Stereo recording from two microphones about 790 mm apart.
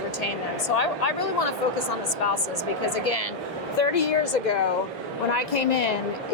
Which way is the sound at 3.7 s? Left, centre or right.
Left.